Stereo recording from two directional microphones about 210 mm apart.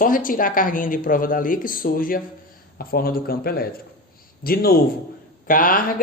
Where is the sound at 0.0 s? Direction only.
40° left (ahead or behind).